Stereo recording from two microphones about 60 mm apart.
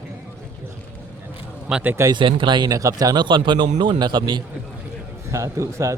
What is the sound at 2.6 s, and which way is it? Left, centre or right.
Speech, right.